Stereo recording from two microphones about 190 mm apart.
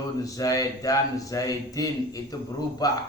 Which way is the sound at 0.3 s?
20° left (ahead or behind).